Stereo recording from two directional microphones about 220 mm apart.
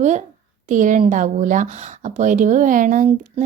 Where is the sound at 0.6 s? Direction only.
35° right (ahead or behind).